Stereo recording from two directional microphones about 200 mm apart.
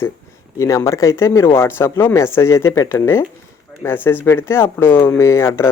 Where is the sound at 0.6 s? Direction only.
15° left (ahead or behind).